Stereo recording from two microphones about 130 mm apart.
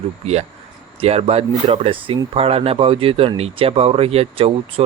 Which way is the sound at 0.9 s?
55° right (ahead or behind).